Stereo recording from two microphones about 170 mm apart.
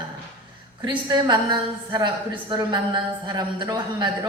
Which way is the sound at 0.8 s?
25° right (ahead or behind).